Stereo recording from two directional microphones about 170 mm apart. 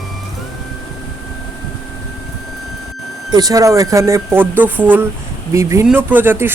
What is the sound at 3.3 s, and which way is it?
Speech, 20° right (ahead or behind).